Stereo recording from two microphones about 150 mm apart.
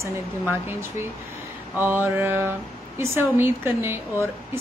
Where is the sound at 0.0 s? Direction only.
15° right (ahead or behind).